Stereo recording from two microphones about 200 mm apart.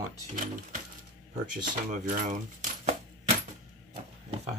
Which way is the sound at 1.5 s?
45° right (ahead or behind).